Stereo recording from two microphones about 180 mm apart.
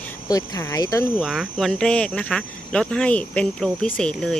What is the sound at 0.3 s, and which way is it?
Speech, 20° left (ahead or behind).